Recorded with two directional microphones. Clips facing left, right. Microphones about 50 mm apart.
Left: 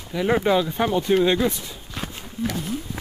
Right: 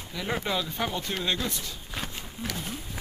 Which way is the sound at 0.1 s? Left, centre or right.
Centre.